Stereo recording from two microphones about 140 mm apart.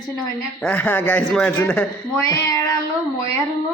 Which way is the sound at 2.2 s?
25° left (ahead or behind).